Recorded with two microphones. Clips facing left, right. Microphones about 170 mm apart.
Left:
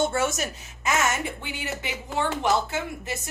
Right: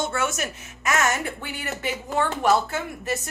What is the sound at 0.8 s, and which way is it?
Speech, 20° left (ahead or behind).